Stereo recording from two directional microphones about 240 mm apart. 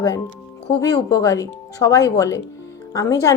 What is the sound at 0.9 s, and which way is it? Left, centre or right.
A woman's voice, centre.